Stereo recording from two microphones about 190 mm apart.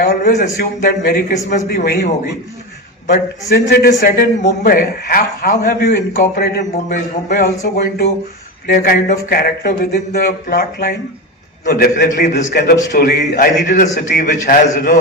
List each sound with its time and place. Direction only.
0.0 s a man's voice: 50° left (ahead or behind)
3.1 s a man's voice: 55° left (ahead or behind)
8.6 s a man's voice: 50° left (ahead or behind)
12.9 s a man's voice: 45° left (ahead or behind)
14.1 s a man's voice: 60° left (ahead or behind)
14.4 s a man's voice: 50° left (ahead or behind)